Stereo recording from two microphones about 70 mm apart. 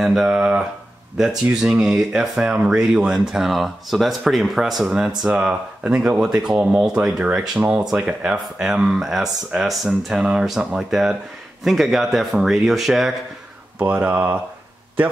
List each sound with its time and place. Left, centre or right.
0.0 s speech: centre
13.7 s speech: right